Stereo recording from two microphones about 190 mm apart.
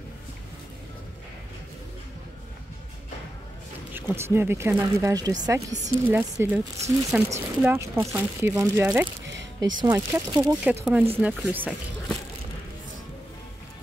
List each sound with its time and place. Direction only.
3.9 s speech: 10° right (ahead or behind)